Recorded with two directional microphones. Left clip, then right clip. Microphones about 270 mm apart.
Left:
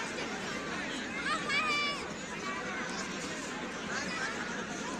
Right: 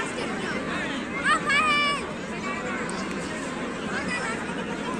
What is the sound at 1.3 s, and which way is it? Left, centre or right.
Vehicle, centre.